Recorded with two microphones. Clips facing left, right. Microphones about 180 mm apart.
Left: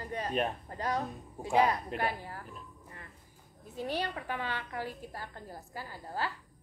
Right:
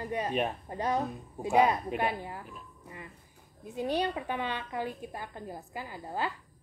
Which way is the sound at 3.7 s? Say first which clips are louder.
Right 5 dB; 20° right (ahead or behind).